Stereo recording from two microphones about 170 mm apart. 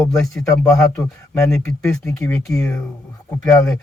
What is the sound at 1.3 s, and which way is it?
Speech, 15° left (ahead or behind).